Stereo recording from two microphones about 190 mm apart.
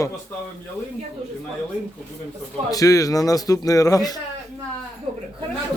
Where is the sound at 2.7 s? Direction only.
20° left (ahead or behind).